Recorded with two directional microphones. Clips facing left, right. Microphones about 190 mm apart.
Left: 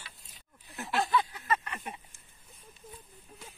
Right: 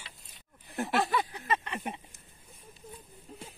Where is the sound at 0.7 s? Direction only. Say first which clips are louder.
Right 1 dB; 55° right (ahead or behind).